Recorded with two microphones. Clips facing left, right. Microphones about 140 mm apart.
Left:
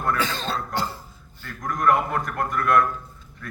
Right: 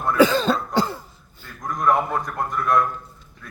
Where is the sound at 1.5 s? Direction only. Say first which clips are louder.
Even; 20° right (ahead or behind).